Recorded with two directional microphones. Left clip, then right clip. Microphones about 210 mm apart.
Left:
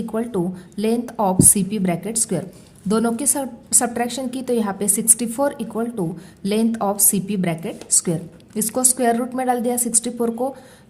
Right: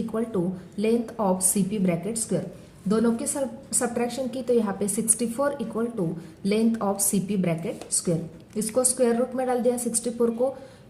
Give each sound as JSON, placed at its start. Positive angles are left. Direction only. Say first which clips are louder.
{"t": 0.1, "sound": "a woman's voice", "louder": "left 5 dB", "side_deg": 35}